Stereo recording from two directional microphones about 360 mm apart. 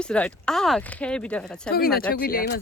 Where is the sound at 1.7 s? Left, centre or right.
Left.